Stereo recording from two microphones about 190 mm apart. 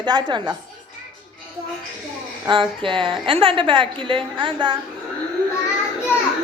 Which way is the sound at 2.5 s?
25° right (ahead or behind).